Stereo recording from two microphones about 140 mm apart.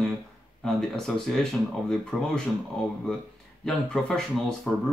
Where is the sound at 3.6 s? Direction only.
5° left (ahead or behind).